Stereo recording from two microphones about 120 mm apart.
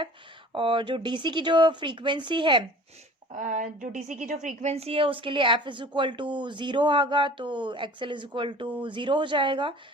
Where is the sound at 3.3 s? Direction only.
90° right.